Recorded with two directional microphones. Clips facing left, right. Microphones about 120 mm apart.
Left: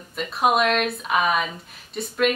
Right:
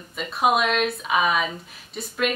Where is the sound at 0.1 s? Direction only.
Centre (ahead or behind).